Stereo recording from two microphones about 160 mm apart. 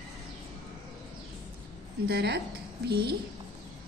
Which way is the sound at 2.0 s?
85° right.